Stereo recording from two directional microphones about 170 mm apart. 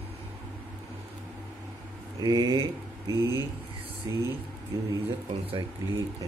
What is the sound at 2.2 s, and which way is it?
Speech, 20° right (ahead or behind).